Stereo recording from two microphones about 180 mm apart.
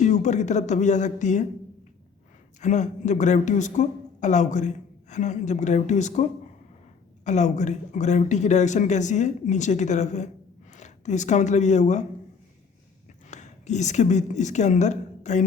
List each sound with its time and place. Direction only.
0.0 s speech: 40° left (ahead or behind)
2.6 s speech: 40° left (ahead or behind)
7.3 s speech: 40° left (ahead or behind)
13.3 s a woman's voice: 40° left (ahead or behind)